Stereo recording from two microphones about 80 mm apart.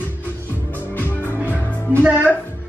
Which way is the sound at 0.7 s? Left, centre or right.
Left.